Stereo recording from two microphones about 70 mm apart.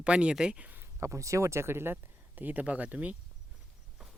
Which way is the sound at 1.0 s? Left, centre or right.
Right.